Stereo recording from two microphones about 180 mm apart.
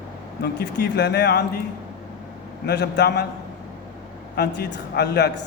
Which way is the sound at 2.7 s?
70° left (ahead or behind).